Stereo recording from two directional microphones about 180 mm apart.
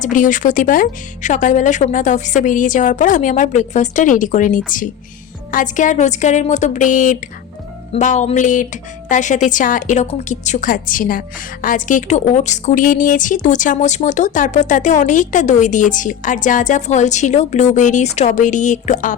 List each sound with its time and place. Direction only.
0.0 s a woman's voice: 45° left (ahead or behind)
7.9 s music: 40° left (ahead or behind)
9.0 s a woman's voice: 45° left (ahead or behind)